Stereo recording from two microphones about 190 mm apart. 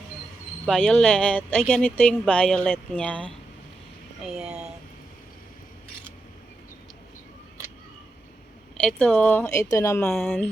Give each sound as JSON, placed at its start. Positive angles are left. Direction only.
{"t": 0.6, "sound": "speech", "side_deg": 0}
{"t": 4.2, "sound": "speech", "side_deg": -5}
{"t": 8.8, "sound": "speech", "side_deg": 5}